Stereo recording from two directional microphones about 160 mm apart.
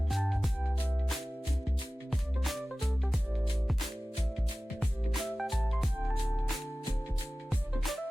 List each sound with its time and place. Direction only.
0.1 s music: centre (ahead or behind)
2.4 s music: centre (ahead or behind)
4.8 s music: centre (ahead or behind)